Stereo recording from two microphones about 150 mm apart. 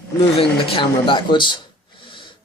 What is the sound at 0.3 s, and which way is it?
Speech, 35° left (ahead or behind).